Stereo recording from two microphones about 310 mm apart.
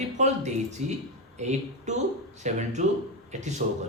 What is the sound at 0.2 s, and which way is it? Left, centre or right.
A man's voice, right.